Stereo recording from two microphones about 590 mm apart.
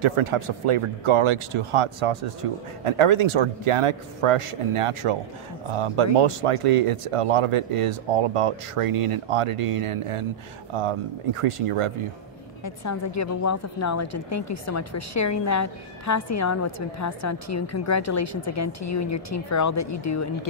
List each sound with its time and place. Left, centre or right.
0.0 s speech: right
12.6 s speech: left